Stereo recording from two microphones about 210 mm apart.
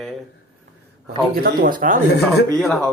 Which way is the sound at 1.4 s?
40° right (ahead or behind).